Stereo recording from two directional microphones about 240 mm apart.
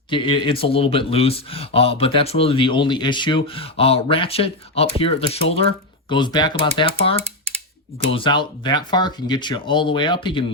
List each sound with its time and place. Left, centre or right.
0.1 s speech: left